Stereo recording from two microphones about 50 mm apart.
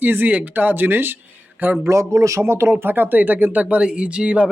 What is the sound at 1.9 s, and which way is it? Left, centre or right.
Speech, right.